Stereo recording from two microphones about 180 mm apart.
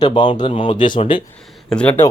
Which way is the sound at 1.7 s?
5° left (ahead or behind).